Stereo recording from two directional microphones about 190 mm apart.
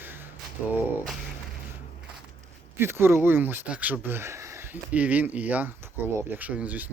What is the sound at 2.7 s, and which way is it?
Speech, 10° right (ahead or behind).